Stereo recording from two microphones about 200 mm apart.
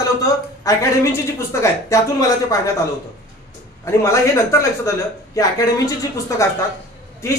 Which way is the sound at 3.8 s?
15° left (ahead or behind).